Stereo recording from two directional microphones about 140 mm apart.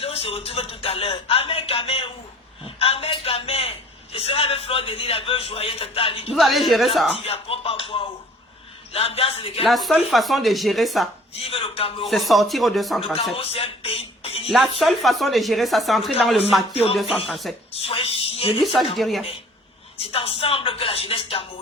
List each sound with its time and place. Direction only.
0.0 s a man's voice: 45° left (ahead or behind)
6.3 s speech: centre (ahead or behind)
7.1 s a man's voice: 45° left (ahead or behind)
9.6 s speech: centre (ahead or behind)
11.3 s a man's voice: 45° left (ahead or behind)
12.0 s speech: centre (ahead or behind)
13.3 s a man's voice: 45° left (ahead or behind)
14.8 s speech: centre (ahead or behind)
17.7 s a man's voice: 45° left (ahead or behind)
18.6 s speech: centre (ahead or behind)
20.0 s a man's voice: 45° left (ahead or behind)